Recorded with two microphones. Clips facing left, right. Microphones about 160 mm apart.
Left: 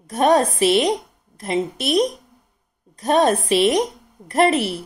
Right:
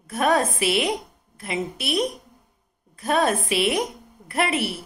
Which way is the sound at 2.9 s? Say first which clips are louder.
Left 5 dB; 35° left (ahead or behind).